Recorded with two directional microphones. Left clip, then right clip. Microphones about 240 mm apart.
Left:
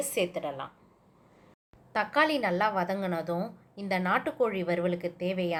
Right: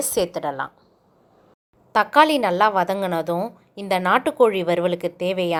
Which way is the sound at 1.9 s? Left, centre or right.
Right.